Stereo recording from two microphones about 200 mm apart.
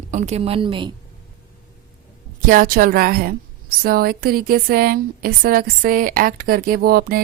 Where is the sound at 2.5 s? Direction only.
45° right (ahead or behind).